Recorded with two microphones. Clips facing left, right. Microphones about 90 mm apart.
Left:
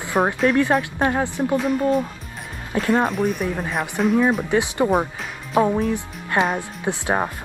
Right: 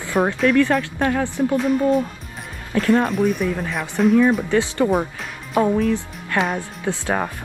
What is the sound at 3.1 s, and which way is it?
Speech, centre (ahead or behind).